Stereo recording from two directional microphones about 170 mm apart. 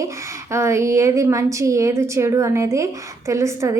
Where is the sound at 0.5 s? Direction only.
15° right (ahead or behind).